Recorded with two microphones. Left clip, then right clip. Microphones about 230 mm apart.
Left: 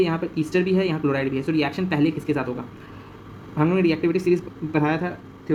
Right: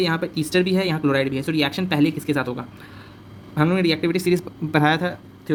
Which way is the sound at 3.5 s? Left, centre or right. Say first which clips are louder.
Right 1 dB; right.